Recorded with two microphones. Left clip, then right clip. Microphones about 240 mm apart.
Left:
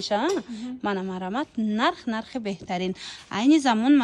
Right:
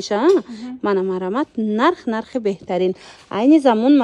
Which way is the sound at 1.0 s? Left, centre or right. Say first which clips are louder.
Right 10 dB; right.